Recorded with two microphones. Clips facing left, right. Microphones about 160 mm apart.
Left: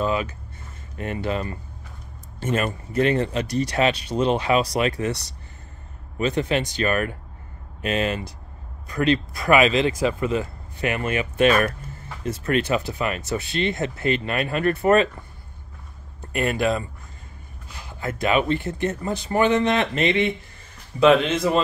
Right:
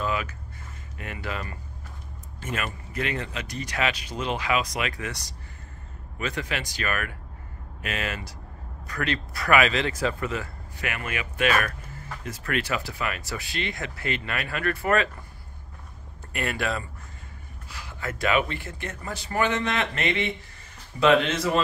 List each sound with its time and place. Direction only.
0.0 s a sound: 25° left (ahead or behind)
0.9 s speech: 30° left (ahead or behind)
6.1 s speech: 25° left (ahead or behind)
16.2 s speech: 20° left (ahead or behind)